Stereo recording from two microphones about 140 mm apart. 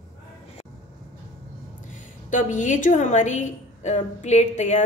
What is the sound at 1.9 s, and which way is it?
A woman's voice, 65° left (ahead or behind).